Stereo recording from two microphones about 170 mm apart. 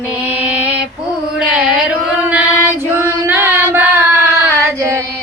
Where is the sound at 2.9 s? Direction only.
10° right (ahead or behind).